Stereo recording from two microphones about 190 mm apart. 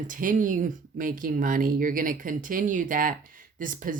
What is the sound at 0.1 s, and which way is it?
Speech, 45° right (ahead or behind).